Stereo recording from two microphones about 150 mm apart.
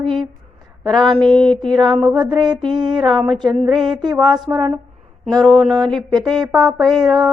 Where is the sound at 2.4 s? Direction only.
30° right (ahead or behind).